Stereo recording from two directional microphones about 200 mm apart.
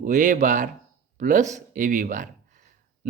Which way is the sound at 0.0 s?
40° right (ahead or behind).